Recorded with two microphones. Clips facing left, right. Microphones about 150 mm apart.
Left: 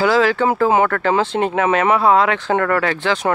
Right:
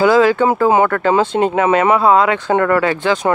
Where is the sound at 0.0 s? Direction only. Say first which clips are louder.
Right 4 dB; 20° right (ahead or behind).